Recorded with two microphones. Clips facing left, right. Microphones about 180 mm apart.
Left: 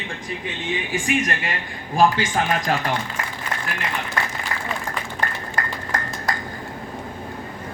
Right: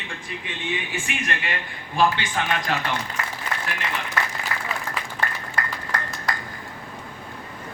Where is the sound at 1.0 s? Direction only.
40° left (ahead or behind).